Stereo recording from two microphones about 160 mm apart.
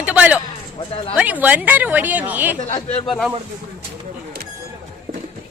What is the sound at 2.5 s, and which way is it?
Speech, 25° left (ahead or behind).